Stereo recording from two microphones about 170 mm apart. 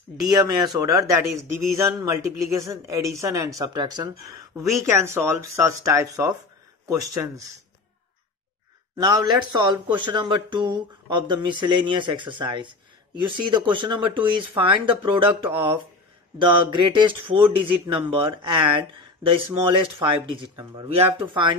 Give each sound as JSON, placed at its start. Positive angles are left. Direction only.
{"t": 0.8, "sound": "speech", "side_deg": -15}
{"t": 8.9, "sound": "speech", "side_deg": -25}